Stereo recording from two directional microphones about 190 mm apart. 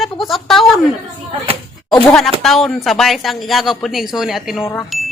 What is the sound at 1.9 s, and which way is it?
Speech, centre (ahead or behind).